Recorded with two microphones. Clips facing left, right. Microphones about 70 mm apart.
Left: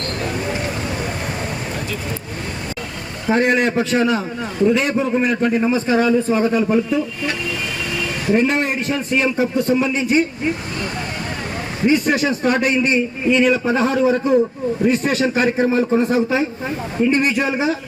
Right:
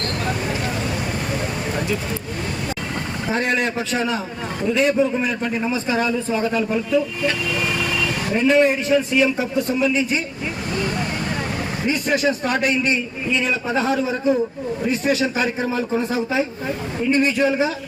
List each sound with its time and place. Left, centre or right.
3.3 s a man's voice: left
8.4 s a man's voice: left
11.9 s speech: left
13.2 s a man's voice: left
17.4 s a man's voice: left